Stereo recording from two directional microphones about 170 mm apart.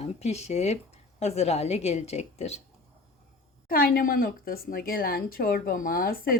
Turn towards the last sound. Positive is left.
turn(degrees=60)  # may be behind; listen again after turning